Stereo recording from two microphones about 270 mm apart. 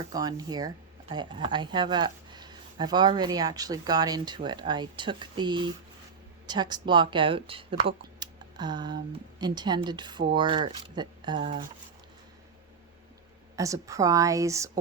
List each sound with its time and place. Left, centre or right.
0.1 s speech: centre
13.6 s speech: centre